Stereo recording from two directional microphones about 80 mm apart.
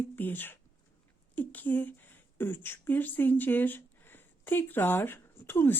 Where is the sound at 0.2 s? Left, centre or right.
Left.